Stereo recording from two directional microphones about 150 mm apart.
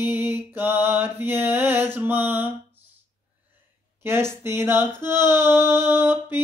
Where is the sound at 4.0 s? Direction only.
15° right (ahead or behind).